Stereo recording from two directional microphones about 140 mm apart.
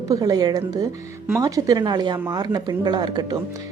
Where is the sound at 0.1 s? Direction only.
25° right (ahead or behind).